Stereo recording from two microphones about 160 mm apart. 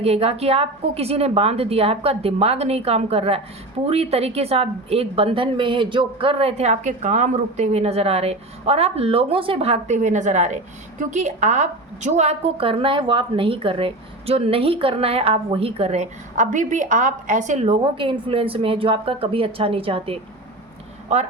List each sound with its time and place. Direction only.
0.0 s a woman's voice: 40° right (ahead or behind)
21.1 s speech: 45° right (ahead or behind)